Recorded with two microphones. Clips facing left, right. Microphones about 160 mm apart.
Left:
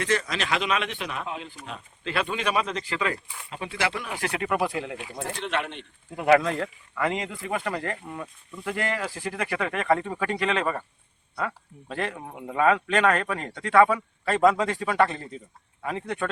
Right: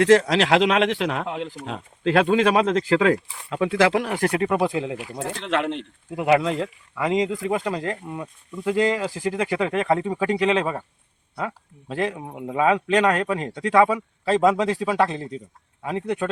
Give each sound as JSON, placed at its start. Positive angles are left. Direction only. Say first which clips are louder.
{"t": 0.0, "sound": "speech", "louder": "right 11 dB", "side_deg": -90}
{"t": 4.4, "sound": "speech", "louder": "right 1 dB", "side_deg": -25}
{"t": 5.4, "sound": "speech", "louder": "right 6 dB", "side_deg": -90}
{"t": 6.1, "sound": "a man's voice", "louder": "right 1 dB", "side_deg": -10}